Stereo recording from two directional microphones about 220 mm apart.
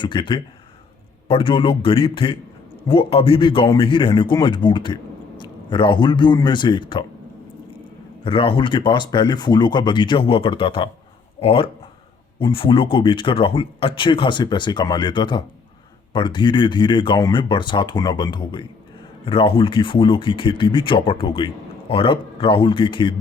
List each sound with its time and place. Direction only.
0.0 s speech: 20° left (ahead or behind)
8.2 s speech: 25° left (ahead or behind)